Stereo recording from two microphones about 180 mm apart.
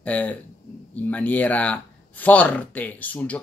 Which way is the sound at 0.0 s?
10° left (ahead or behind).